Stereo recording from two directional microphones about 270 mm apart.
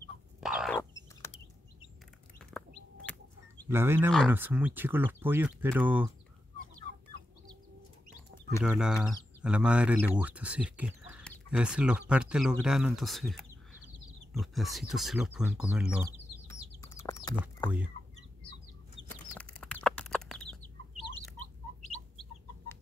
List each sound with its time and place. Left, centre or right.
0.4 s bird: centre
3.1 s chicken: centre
3.6 s speech: centre
8.6 s speech: centre
16.8 s bird: centre
17.6 s speech: centre
19.0 s chicken: centre